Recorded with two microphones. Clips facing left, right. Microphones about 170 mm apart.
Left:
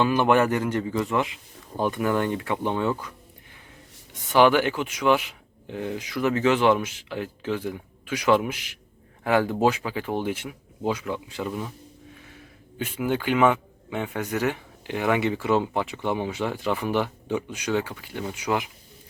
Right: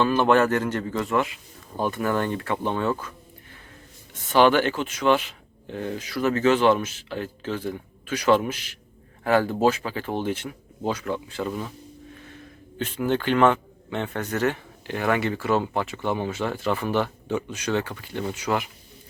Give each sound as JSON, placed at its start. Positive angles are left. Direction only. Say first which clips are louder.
{"t": 0.0, "sound": "a man's voice", "louder": "right 1 dB", "side_deg": 15}
{"t": 4.1, "sound": "a man's voice", "louder": "even", "side_deg": 10}
{"t": 12.8, "sound": "a man's voice", "louder": "right 2 dB", "side_deg": 10}